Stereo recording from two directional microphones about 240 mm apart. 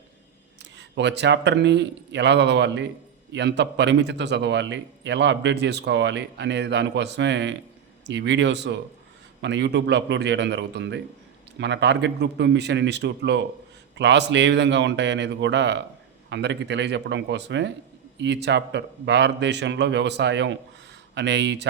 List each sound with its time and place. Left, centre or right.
0.6 s a man's voice: right